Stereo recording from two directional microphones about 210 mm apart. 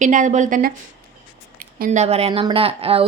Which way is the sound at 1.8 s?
35° right (ahead or behind).